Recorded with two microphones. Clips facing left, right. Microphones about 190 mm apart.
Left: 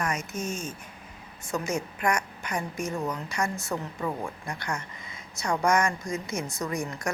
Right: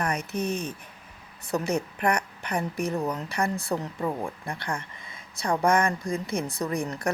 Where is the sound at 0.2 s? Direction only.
65° right (ahead or behind).